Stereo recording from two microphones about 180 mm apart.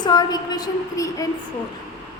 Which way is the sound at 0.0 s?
20° left (ahead or behind).